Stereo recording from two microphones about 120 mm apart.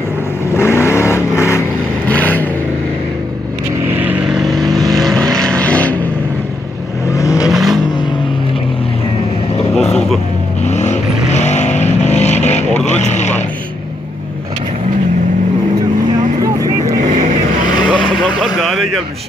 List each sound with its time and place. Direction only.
0.6 s vehicle: 20° left (ahead or behind)
3.9 s vehicle: 15° right (ahead or behind)
4.3 s vehicle: centre (ahead or behind)
7.2 s vehicle: 30° left (ahead or behind)
7.4 s vehicle: centre (ahead or behind)
10.6 s vehicle: 70° left (ahead or behind)
17.8 s vehicle: 5° left (ahead or behind)
18.6 s a sound: centre (ahead or behind)